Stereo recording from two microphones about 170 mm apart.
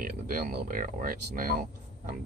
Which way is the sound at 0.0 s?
55° right (ahead or behind).